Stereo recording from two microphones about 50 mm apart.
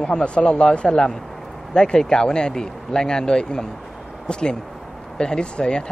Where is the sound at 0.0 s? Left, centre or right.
Centre.